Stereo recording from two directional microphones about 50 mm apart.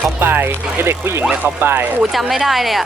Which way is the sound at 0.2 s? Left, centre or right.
Right.